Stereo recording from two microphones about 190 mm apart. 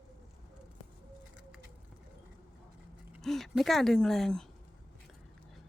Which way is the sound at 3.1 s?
Centre (ahead or behind).